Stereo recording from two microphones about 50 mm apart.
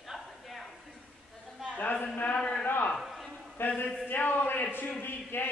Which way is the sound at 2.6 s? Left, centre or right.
Left.